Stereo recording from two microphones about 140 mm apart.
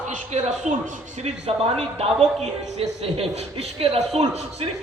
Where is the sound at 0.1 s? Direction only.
55° right (ahead or behind).